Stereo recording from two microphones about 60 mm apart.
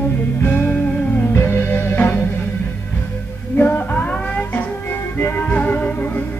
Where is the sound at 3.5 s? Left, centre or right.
Left.